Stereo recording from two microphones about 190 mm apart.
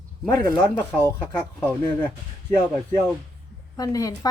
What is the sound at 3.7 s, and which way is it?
Speech, 20° left (ahead or behind).